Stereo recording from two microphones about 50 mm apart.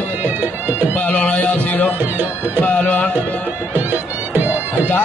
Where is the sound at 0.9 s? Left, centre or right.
Left.